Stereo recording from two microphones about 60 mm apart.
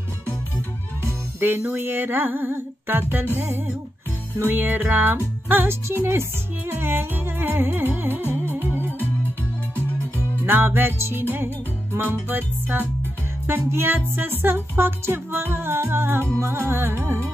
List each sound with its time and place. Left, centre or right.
1.0 s music: right
1.7 s speech: right
9.8 s music: left
10.4 s speech: right
16.3 s music: right